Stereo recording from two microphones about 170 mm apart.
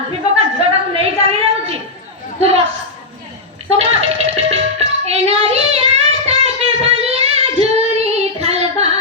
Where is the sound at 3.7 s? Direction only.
35° right (ahead or behind).